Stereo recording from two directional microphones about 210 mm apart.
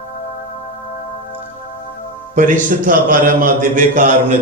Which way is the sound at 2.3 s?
40° right (ahead or behind).